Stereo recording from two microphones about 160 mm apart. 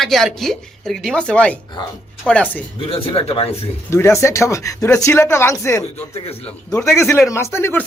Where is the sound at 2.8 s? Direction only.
35° left (ahead or behind).